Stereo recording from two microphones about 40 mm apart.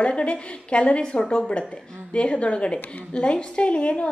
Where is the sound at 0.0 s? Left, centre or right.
Left.